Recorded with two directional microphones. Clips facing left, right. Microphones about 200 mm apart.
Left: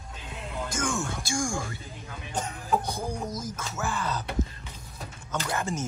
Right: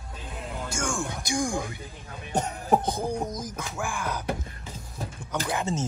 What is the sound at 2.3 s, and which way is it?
Speech, 40° right (ahead or behind).